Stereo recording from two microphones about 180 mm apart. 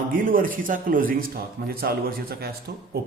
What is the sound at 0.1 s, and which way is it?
A man's voice, 50° right (ahead or behind).